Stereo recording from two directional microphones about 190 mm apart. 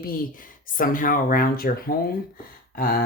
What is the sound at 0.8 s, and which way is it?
Speech, 45° left (ahead or behind).